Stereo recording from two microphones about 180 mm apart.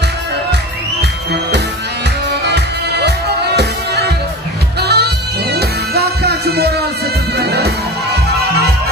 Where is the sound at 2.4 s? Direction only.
70° right (ahead or behind).